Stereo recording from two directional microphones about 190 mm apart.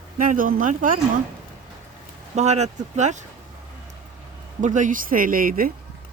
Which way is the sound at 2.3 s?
35° right (ahead or behind).